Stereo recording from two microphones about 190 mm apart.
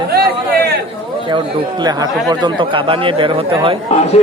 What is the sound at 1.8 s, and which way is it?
Speech, 20° right (ahead or behind).